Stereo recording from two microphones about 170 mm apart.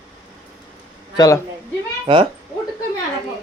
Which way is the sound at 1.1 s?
20° left (ahead or behind).